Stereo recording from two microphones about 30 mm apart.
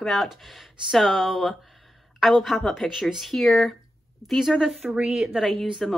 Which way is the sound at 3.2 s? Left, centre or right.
Centre.